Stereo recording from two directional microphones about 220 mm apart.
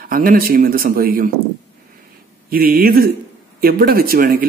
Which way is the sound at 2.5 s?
40° right (ahead or behind).